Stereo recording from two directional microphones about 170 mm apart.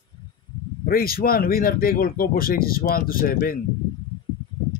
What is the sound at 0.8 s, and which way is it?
Speech, 60° left (ahead or behind).